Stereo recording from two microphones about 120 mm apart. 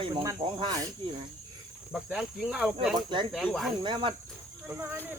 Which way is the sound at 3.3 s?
Centre (ahead or behind).